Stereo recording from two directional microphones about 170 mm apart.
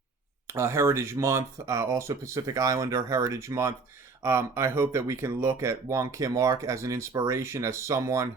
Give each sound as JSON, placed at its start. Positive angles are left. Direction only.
{"t": 0.4, "sound": "speech", "side_deg": -15}